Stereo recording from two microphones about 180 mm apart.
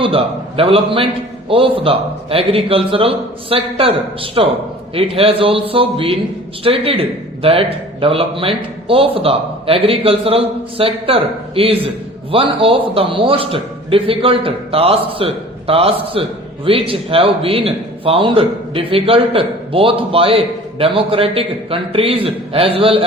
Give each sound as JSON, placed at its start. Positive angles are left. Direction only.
{"t": 0.0, "sound": "speech", "side_deg": -30}